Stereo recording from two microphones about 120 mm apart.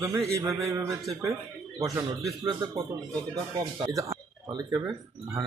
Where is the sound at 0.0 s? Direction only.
25° right (ahead or behind).